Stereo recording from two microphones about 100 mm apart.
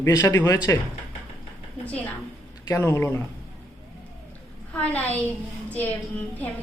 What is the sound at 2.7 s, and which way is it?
Speech, 25° left (ahead or behind).